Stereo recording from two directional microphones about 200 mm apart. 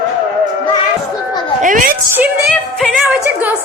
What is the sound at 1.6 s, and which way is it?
Music, 40° right (ahead or behind).